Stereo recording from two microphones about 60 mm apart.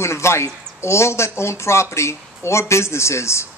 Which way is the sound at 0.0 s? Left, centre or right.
Left.